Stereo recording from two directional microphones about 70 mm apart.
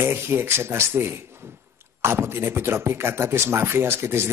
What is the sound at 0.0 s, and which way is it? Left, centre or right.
Speech, right.